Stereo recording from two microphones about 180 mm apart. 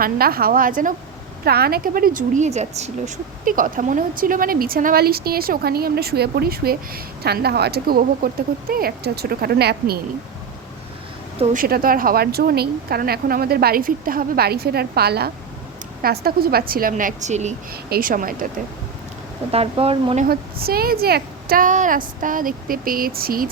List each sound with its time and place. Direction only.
0.0 s a woman's voice: 55° right (ahead or behind)
1.5 s a woman's voice: 60° right (ahead or behind); by 2.9 s 40° right (ahead or behind)
3.4 s speech: 50° right (ahead or behind)
11.5 s a woman's voice: 55° right (ahead or behind)
17.8 s a woman's voice: 55° right (ahead or behind)
19.5 s speech: 35° right (ahead or behind)
20.2 s a woman's voice: 55° right (ahead or behind)